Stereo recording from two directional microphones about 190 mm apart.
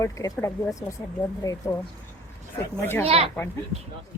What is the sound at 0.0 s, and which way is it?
Speech, 15° left (ahead or behind).